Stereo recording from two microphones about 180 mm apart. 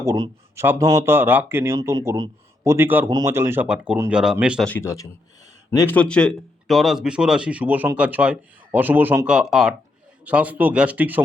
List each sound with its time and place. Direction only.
0.0 s speech: 15° right (ahead or behind)
4.7 s a man's voice: 15° left (ahead or behind); by 11.2 s 10° right (ahead or behind)